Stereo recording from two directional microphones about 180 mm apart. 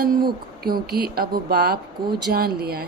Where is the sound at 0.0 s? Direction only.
55° right (ahead or behind).